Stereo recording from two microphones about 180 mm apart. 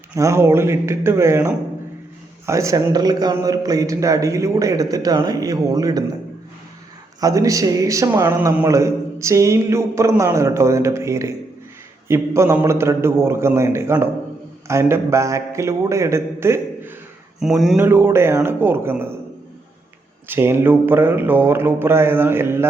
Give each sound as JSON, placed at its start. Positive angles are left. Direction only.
{"t": 0.2, "sound": "a man's voice", "side_deg": -15}
{"t": 7.2, "sound": "a man's voice", "side_deg": -20}
{"t": 17.4, "sound": "mantra", "side_deg": 0}
{"t": 17.7, "sound": "a man's voice", "side_deg": -15}
{"t": 20.2, "sound": "a man's voice", "side_deg": -10}